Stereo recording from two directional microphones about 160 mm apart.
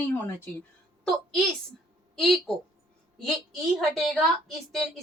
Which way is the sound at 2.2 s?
Centre (ahead or behind).